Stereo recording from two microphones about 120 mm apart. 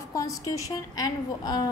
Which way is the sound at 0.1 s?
30° left (ahead or behind).